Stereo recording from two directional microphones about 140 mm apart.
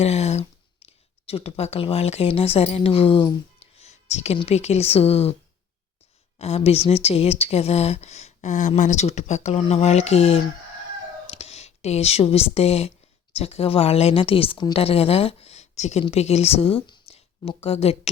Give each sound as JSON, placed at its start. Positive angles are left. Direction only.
{"t": 0.0, "sound": "speech", "side_deg": 50}
{"t": 6.4, "sound": "speech", "side_deg": 45}